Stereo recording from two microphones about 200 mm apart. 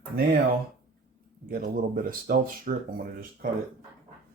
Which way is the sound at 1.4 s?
50° right (ahead or behind).